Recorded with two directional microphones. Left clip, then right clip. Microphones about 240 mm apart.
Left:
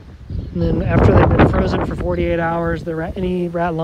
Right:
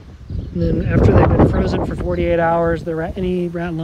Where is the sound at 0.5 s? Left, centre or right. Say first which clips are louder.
Left 1 dB; centre.